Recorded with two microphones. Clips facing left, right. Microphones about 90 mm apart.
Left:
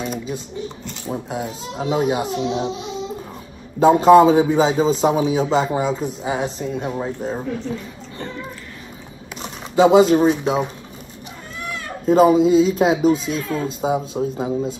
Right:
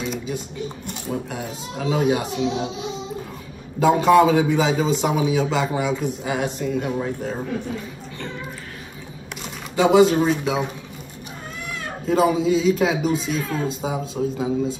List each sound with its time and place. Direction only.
0.0 s a sound: 45° left (ahead or behind)
1.0 s speech: 20° left (ahead or behind)
3.8 s a man's voice: 35° left (ahead or behind)
9.8 s speech: 25° left (ahead or behind)
12.1 s a man's voice: 35° left (ahead or behind)